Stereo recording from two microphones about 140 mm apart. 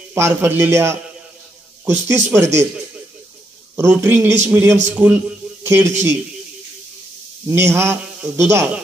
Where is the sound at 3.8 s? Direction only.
20° right (ahead or behind).